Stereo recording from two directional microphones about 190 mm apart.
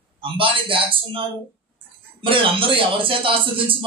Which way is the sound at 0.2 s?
25° right (ahead or behind).